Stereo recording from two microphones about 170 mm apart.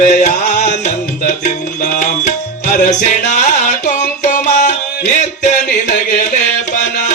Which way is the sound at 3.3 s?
45° left (ahead or behind).